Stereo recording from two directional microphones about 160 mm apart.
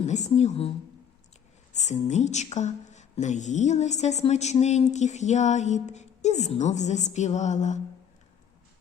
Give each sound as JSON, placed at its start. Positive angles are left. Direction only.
{"t": 0.0, "sound": "a woman's voice", "side_deg": 45}
{"t": 1.7, "sound": "a woman's voice", "side_deg": 45}